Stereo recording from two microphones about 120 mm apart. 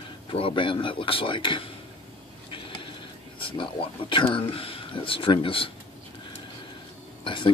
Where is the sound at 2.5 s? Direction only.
45° left (ahead or behind).